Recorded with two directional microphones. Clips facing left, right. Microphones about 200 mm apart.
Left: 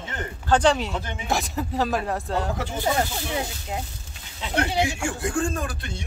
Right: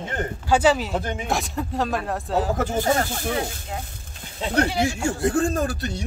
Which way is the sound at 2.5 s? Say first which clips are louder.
Right 4 dB; 45° right (ahead or behind).